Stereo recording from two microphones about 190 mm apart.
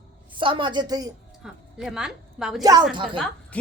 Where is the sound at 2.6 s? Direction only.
20° right (ahead or behind).